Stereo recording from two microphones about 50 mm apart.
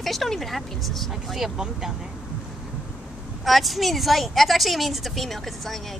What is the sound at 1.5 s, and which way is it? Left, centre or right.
Speech, centre.